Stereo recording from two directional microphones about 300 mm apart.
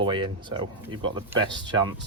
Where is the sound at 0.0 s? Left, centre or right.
Centre.